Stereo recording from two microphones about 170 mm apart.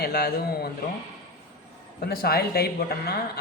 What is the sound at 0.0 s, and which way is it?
Speech, 65° left (ahead or behind).